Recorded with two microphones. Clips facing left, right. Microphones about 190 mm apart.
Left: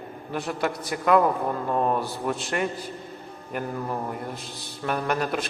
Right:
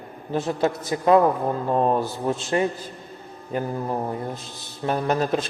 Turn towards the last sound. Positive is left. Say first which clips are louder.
# right 4 dB
turn(degrees=-25)  # may be behind; listen again after turning